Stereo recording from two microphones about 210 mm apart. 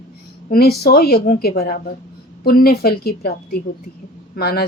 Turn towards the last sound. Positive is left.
turn(degrees=50)  # may be behind; listen again after turning